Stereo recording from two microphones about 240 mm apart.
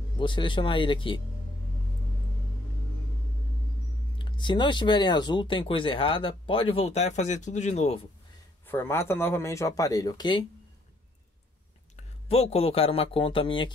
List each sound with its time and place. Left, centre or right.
0.2 s speech: centre
4.2 s speech: centre
8.6 s speech: centre
12.0 s speech: left